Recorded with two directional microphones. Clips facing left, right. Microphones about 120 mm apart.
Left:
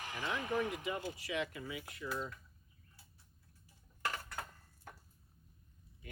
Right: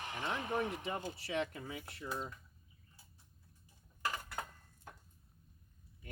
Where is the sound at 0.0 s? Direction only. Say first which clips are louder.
Right 1 dB; 25° right (ahead or behind).